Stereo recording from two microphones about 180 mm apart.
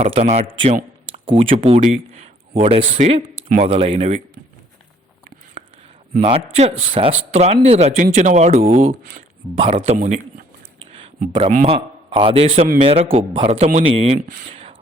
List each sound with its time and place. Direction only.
0.0 s speech: 40° right (ahead or behind)
6.1 s speech: 40° right (ahead or behind)
11.4 s speech: 40° right (ahead or behind)
14.3 s speech: 50° right (ahead or behind)
14.5 s a sound: 35° right (ahead or behind)